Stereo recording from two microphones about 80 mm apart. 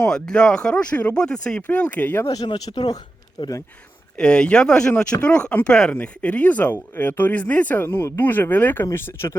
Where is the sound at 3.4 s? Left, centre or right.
Left.